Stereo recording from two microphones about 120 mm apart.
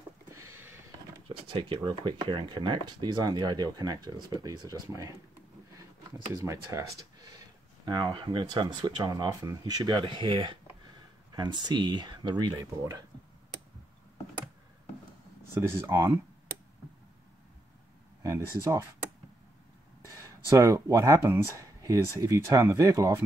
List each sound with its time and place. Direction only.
0.3 s a sound: 25° right (ahead or behind)
1.5 s speech: 45° right (ahead or behind); by 5.1 s 25° right (ahead or behind)
6.3 s speech: 25° right (ahead or behind)
15.5 s speech: 20° right (ahead or behind)
18.2 s speech: 25° right (ahead or behind)
20.4 s speech: 25° right (ahead or behind)